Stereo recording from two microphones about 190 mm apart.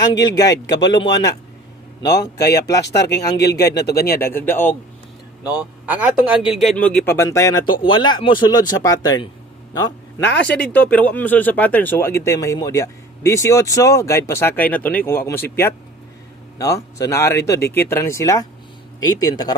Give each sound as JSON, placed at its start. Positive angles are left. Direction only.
{"t": 0.2, "sound": "speech", "side_deg": 20}
{"t": 3.3, "sound": "speech", "side_deg": 60}
{"t": 4.2, "sound": "speech", "side_deg": 10}
{"t": 5.4, "sound": "a man's voice", "side_deg": -5}
{"t": 10.5, "sound": "speech", "side_deg": 10}